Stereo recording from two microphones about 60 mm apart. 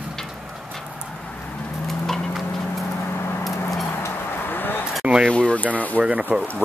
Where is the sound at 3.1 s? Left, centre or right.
Left.